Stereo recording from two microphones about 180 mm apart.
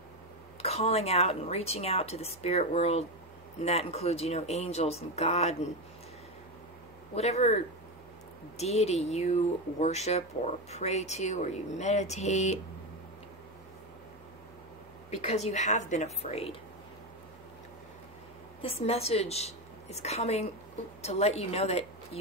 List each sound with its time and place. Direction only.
0.6 s speech: 35° left (ahead or behind)
7.2 s speech: 35° left (ahead or behind)
15.0 s speech: 40° left (ahead or behind)
18.6 s a woman's voice: 35° left (ahead or behind)